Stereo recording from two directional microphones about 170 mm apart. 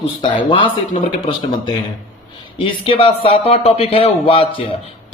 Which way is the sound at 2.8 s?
30° left (ahead or behind).